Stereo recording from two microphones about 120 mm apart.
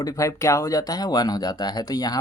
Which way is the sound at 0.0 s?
25° left (ahead or behind).